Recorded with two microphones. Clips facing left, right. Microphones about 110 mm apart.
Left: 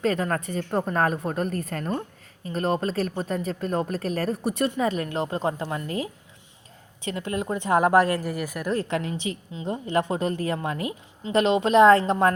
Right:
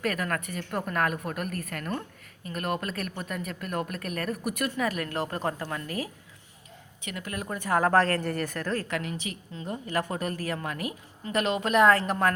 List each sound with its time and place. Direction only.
0.0 s a woman's voice: 25° left (ahead or behind)
9.5 s a woman's voice: 20° left (ahead or behind)